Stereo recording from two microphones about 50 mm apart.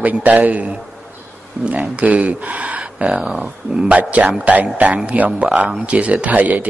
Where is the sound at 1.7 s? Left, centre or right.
Right.